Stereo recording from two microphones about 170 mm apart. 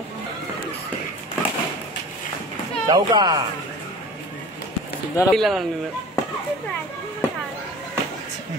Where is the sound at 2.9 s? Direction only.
25° right (ahead or behind).